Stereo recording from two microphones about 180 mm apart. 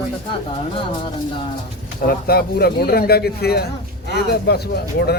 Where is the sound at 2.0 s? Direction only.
60° left (ahead or behind).